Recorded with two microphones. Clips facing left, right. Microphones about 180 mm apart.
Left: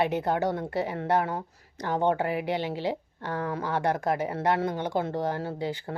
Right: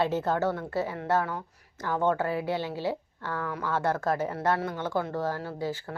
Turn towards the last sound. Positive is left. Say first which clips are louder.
# left 1 dB
turn(degrees=20)  # may be behind; listen again after turning